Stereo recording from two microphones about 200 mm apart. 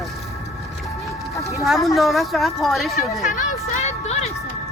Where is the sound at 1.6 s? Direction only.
Centre (ahead or behind).